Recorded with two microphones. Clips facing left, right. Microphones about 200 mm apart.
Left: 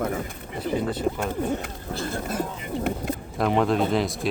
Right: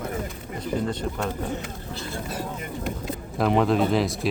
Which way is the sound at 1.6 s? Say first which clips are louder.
Left 3 dB; 45° left (ahead or behind).